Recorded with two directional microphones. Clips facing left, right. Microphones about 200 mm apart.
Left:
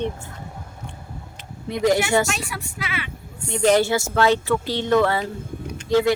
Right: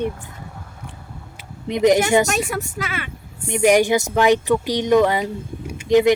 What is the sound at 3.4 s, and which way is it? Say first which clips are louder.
Speech: right 2 dB; 15° right (ahead or behind).